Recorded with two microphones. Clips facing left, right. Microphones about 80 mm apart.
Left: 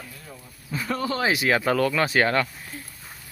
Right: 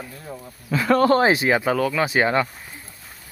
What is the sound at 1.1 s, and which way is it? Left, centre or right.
Speech, right.